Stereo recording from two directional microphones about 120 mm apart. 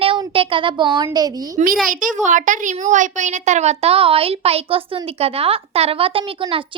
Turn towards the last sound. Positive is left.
turn(degrees=-50)  # may be behind; listen again after turning